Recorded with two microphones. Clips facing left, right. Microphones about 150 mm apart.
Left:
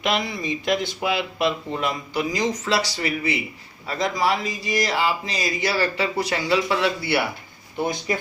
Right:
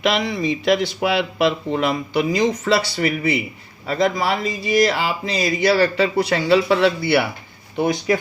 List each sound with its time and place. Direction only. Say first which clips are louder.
0.0 s speech: right 5 dB; 80° right; by 7.3 s 60° right (ahead or behind)